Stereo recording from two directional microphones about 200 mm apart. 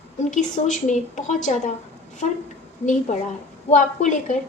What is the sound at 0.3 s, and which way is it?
A woman's voice, 40° left (ahead or behind).